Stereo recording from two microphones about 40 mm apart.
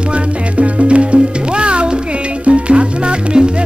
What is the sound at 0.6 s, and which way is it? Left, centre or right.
Music, right.